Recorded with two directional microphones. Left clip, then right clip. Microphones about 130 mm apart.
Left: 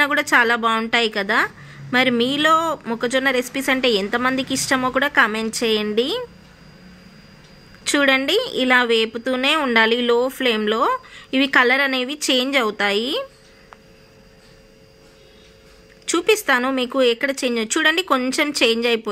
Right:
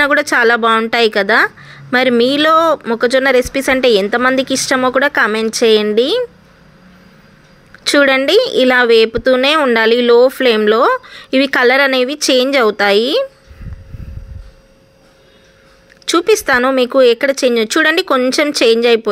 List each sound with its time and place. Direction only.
0.0 s speech: 30° right (ahead or behind)
7.8 s a woman's voice: 35° right (ahead or behind)
16.1 s speech: 35° right (ahead or behind)